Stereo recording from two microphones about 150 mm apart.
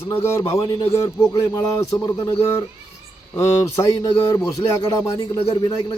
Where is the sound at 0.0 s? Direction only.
15° left (ahead or behind).